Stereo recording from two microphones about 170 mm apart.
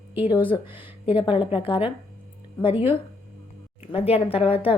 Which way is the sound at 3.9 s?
35° left (ahead or behind).